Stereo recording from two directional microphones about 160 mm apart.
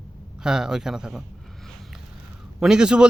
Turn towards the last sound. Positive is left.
turn(degrees=-5)  # may be behind; listen again after turning